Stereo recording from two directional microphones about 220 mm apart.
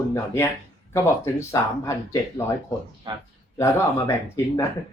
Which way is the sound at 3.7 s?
15° left (ahead or behind).